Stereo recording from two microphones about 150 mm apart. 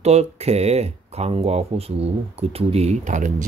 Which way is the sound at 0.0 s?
45° right (ahead or behind).